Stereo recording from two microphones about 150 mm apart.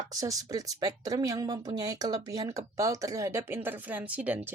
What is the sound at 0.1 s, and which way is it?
Speech, 25° right (ahead or behind).